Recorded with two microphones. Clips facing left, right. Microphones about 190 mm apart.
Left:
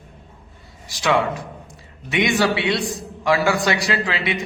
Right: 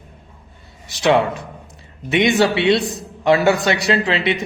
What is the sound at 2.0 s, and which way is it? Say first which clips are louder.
Speech: right 4 dB; 25° right (ahead or behind).